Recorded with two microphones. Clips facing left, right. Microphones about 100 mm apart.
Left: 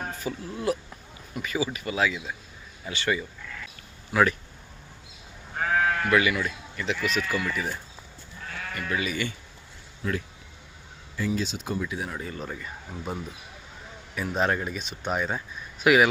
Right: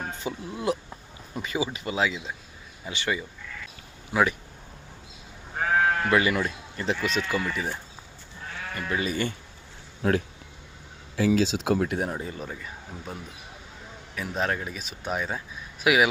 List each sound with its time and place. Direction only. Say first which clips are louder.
0.1 s speech: even; 20° right (ahead or behind)
5.5 s sheep: right 1 dB; 20° right (ahead or behind)
6.4 s speech: right 1 dB; 30° right (ahead or behind)
10.0 s speech: right 6 dB; 60° right (ahead or behind)
11.2 s speech: right 6 dB; 90° right; by 12.0 s 60° right (ahead or behind)
12.2 s speech: even; 10° right (ahead or behind)
14.2 s speech: left 2 dB; centre (ahead or behind)